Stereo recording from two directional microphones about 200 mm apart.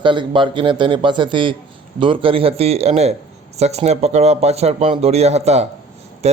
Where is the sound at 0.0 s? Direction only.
25° right (ahead or behind).